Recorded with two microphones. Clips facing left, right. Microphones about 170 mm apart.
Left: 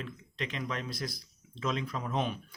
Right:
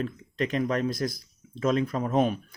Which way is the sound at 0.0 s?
45° right (ahead or behind).